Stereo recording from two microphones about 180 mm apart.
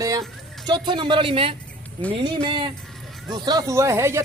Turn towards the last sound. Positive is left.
turn(degrees=-15)  # may be behind; listen again after turning